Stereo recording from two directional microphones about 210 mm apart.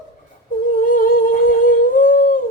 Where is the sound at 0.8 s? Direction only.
40° left (ahead or behind).